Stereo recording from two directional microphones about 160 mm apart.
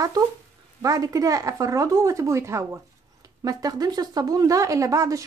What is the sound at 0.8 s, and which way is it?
Speech, 20° right (ahead or behind).